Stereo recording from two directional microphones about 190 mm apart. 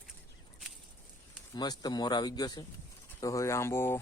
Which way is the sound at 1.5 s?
20° left (ahead or behind).